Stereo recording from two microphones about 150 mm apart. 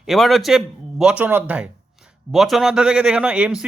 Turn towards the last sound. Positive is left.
turn(degrees=-5)  # may be behind; listen again after turning